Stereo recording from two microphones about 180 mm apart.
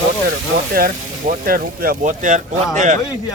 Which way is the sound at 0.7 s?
55° right (ahead or behind).